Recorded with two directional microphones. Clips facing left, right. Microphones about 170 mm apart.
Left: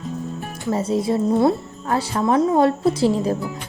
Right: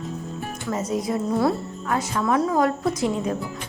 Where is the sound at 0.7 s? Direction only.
30° left (ahead or behind).